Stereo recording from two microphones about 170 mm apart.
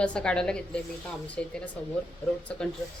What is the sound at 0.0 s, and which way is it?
A woman's voice, 5° left (ahead or behind).